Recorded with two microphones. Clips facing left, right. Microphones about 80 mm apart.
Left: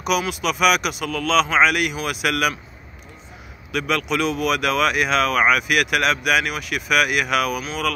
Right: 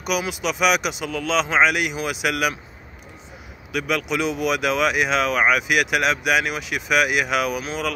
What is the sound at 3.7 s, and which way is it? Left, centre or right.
Speech, centre.